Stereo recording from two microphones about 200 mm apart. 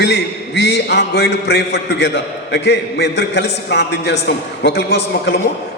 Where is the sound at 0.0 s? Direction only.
60° left (ahead or behind).